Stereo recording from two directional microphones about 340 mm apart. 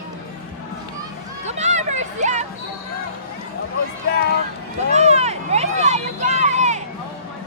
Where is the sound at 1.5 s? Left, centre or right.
Centre.